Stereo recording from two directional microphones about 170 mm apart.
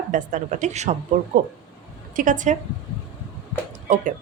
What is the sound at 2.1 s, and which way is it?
Speech, 50° right (ahead or behind).